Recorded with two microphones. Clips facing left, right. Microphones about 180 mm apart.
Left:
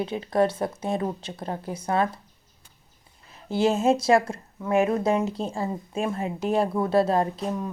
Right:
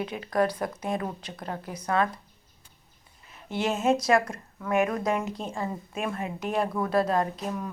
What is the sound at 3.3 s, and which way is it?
A woman's voice, 30° left (ahead or behind).